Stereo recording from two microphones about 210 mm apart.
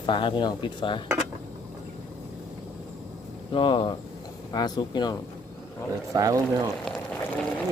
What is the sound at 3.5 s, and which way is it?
Speech, 25° left (ahead or behind).